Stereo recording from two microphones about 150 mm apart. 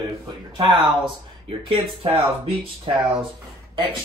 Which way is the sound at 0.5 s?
30° right (ahead or behind).